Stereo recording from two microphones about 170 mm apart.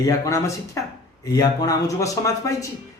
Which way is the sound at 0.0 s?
20° left (ahead or behind).